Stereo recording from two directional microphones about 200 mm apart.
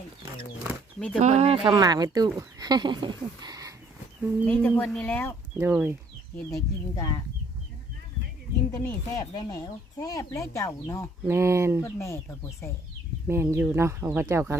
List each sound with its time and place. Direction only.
1.2 s speech: 35° right (ahead or behind)
1.7 s speech: 20° right (ahead or behind)
4.4 s speech: 10° left (ahead or behind)
5.5 s speech: 10° right (ahead or behind)
6.5 s speech: 15° left (ahead or behind)
8.7 s speech: 15° left (ahead or behind)
11.3 s speech: 15° right (ahead or behind)
11.9 s speech: 15° left (ahead or behind)
13.2 s speech: 15° right (ahead or behind)